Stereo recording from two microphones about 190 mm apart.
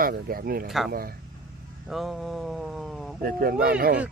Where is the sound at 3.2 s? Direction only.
50° right (ahead or behind).